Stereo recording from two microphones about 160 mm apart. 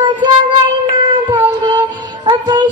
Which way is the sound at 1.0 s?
30° right (ahead or behind).